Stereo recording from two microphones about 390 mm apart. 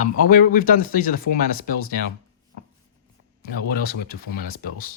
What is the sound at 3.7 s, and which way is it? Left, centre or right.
Speech, left.